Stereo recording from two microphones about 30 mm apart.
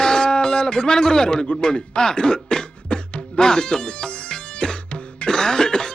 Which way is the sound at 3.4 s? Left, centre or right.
Left.